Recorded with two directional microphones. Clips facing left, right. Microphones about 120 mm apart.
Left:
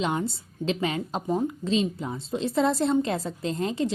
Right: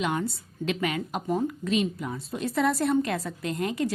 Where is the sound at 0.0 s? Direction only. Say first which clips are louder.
Left 1 dB; 25° left (ahead or behind).